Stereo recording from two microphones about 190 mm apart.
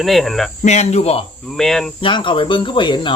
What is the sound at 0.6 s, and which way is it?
Cricket, 35° left (ahead or behind).